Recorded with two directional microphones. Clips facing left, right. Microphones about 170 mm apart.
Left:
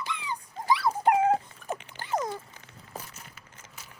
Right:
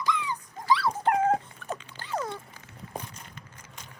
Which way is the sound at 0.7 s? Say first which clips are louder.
Left 1 dB; 15° left (ahead or behind).